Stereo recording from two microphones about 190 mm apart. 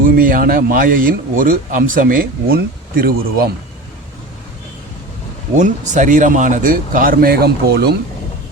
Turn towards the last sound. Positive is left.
turn(degrees=-55)  # may be behind; listen again after turning